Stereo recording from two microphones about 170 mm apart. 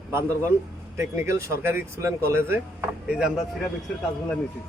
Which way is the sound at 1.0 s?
15° right (ahead or behind).